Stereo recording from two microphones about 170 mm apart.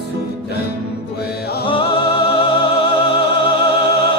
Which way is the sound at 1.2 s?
70° left (ahead or behind).